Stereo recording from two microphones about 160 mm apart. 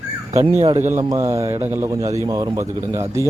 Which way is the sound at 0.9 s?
20° right (ahead or behind).